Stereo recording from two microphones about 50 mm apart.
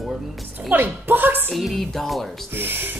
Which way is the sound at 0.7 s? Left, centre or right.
Right.